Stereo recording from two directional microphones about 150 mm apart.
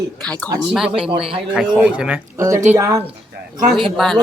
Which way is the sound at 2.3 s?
20° right (ahead or behind).